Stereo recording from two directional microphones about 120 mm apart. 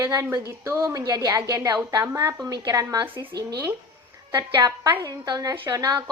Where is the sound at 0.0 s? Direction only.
25° right (ahead or behind).